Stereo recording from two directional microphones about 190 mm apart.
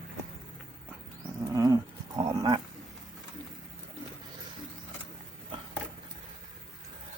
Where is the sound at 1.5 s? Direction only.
20° right (ahead or behind).